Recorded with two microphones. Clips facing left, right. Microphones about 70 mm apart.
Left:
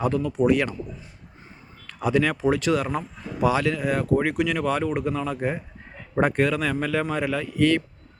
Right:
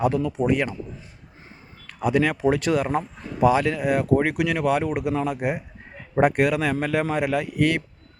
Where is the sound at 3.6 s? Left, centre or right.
Right.